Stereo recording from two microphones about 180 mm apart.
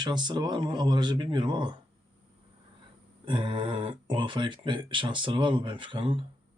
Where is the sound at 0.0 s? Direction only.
25° right (ahead or behind).